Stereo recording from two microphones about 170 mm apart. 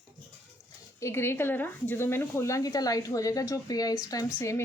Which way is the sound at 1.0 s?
15° left (ahead or behind).